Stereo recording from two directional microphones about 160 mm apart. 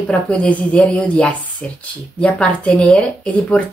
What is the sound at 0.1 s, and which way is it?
Speech, 5° left (ahead or behind).